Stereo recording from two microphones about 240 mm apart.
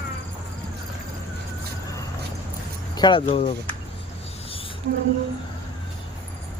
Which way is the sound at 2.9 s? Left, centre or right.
Centre.